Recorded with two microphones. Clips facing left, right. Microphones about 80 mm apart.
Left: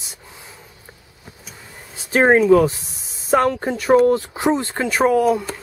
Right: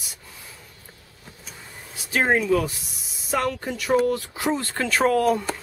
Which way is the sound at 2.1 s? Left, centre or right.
Left.